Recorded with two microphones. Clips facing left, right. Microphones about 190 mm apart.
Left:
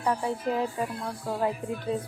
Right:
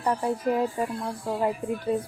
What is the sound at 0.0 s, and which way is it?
Speech, 10° right (ahead or behind).